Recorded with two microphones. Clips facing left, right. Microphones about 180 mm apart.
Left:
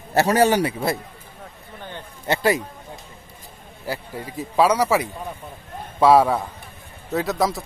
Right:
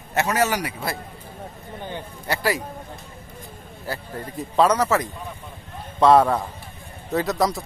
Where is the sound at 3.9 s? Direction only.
10° left (ahead or behind).